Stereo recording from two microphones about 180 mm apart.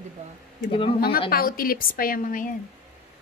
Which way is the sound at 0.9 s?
55° left (ahead or behind).